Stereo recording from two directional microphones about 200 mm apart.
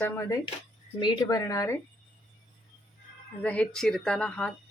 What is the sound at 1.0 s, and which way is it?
Speech, 20° left (ahead or behind).